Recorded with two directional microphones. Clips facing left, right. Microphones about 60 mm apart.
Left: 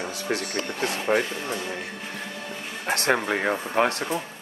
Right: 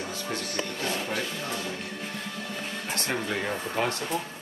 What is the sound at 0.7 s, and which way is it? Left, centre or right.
Speech, left.